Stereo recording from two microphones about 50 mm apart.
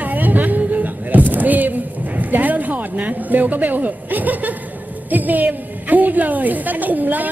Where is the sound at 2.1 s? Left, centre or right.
Right.